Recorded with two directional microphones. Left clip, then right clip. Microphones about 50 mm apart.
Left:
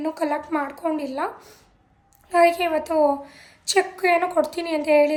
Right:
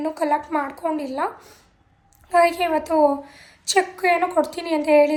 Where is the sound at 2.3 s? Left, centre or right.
Left.